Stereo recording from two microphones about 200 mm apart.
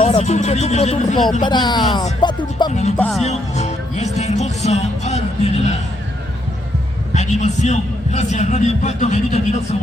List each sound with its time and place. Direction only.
0.0 s a man's voice: 35° left (ahead or behind)
1.4 s speech: 20° left (ahead or behind)
2.2 s music: 20° left (ahead or behind)
2.6 s a man's voice: 35° left (ahead or behind)
3.0 s speech: centre (ahead or behind)
3.2 s music: 35° left (ahead or behind)
7.1 s a man's voice: 35° left (ahead or behind)